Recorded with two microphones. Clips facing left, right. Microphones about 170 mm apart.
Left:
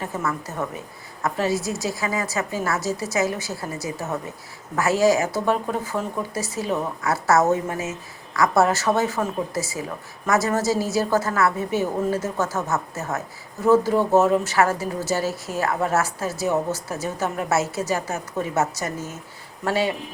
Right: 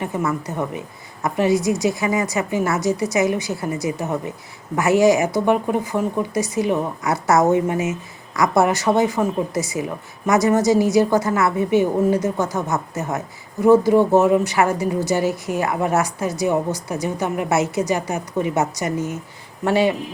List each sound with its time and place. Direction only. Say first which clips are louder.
0.0 s a woman's voice: right 4 dB; 15° right (ahead or behind)